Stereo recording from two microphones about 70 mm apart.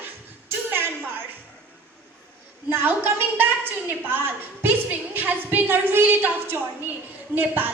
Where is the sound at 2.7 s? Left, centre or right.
Right.